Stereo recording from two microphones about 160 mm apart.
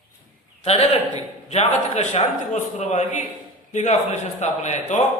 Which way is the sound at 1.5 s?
45° left (ahead or behind).